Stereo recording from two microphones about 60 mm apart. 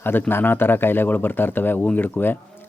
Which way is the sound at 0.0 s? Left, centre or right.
Left.